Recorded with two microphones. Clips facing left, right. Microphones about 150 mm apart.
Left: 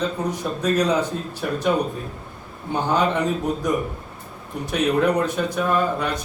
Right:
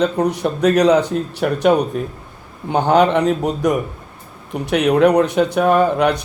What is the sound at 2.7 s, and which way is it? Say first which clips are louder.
Speech: right 7 dB; 65° right (ahead or behind).